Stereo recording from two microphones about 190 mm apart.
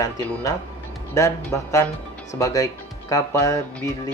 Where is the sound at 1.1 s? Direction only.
15° left (ahead or behind).